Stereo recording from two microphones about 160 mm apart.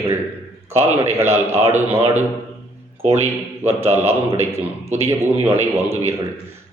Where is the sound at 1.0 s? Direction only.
15° right (ahead or behind).